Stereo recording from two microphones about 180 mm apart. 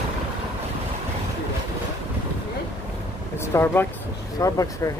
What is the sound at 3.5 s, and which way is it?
Speech, 10° left (ahead or behind).